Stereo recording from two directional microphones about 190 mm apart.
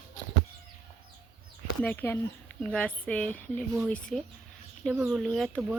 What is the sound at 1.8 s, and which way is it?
Speech, 10° left (ahead or behind).